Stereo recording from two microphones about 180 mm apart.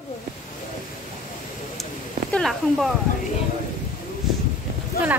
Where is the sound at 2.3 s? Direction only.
Centre (ahead or behind).